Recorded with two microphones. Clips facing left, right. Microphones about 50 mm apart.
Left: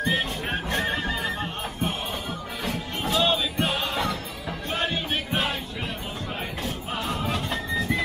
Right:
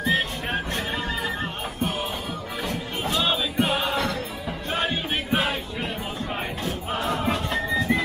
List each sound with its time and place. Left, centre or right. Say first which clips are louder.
0.0 s music: right 2 dB; centre
3.0 s music: left 1 dB; centre
3.9 s music: right 2 dB; centre
7.2 s music: right 3 dB; centre